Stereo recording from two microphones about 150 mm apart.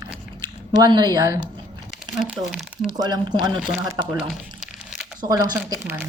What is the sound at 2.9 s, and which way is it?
Speech, 30° right (ahead or behind).